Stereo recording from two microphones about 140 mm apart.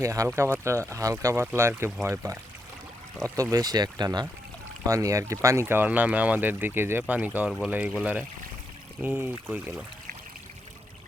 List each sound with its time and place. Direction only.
0.0 s speech: 20° right (ahead or behind)